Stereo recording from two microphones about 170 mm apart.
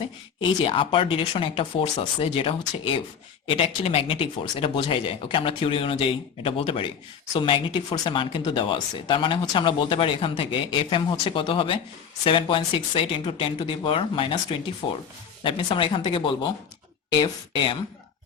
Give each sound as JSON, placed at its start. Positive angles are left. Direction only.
{"t": 0.3, "sound": "speech", "side_deg": 30}